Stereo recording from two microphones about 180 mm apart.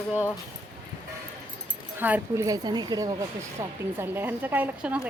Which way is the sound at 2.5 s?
20° right (ahead or behind).